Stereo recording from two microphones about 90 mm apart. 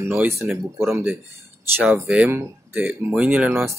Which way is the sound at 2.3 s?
25° right (ahead or behind).